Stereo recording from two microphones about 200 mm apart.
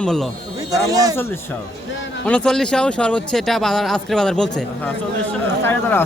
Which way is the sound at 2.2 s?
5° left (ahead or behind).